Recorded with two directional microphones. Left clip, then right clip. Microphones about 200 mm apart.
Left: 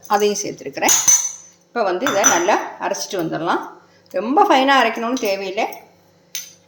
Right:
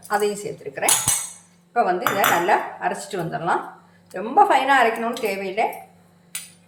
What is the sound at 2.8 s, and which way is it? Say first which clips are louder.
Speech: left 3 dB; 50° left (ahead or behind).